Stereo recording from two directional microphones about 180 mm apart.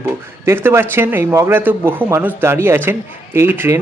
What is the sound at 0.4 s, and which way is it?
Speech, 15° right (ahead or behind).